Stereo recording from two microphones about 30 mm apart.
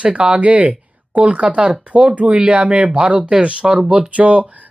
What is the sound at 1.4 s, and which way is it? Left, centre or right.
Speech, right.